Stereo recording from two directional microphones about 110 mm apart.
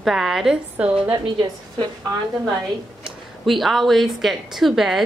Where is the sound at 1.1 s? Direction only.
40° right (ahead or behind).